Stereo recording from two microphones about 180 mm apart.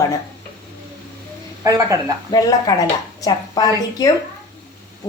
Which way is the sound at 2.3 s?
20° left (ahead or behind).